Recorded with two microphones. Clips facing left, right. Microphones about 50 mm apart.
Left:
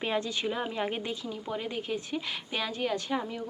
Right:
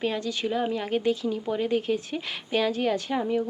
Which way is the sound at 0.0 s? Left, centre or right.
Centre.